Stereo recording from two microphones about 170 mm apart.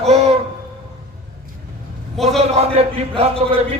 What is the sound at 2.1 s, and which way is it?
Speech, centre (ahead or behind).